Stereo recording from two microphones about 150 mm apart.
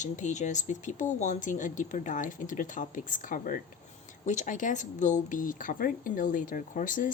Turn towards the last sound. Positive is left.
turn(degrees=60)  # may be behind; listen again after turning